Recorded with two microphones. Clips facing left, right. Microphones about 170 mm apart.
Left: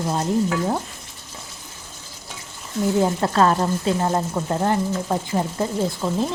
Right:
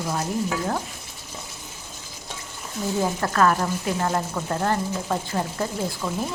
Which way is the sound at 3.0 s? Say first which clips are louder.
Left 1 dB; 25° left (ahead or behind).